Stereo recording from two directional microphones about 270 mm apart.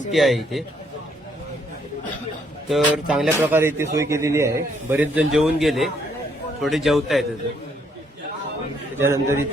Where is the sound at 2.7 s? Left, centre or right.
Centre.